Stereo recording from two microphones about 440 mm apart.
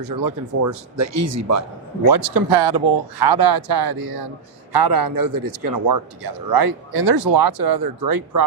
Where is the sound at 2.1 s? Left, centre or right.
Right.